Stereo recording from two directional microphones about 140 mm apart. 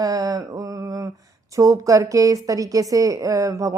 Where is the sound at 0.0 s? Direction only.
25° right (ahead or behind).